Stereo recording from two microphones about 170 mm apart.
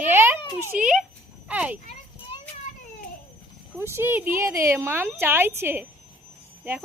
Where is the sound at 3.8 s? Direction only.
15° right (ahead or behind).